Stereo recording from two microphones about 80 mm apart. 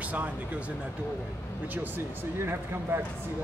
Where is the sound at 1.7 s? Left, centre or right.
Right.